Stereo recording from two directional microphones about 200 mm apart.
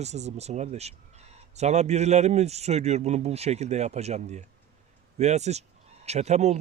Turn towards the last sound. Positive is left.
turn(degrees=-35)  # may be behind; listen again after turning